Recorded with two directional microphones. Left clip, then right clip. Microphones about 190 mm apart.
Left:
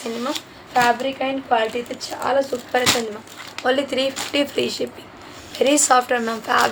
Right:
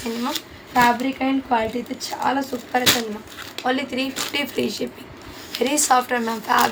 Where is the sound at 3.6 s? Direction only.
20° left (ahead or behind).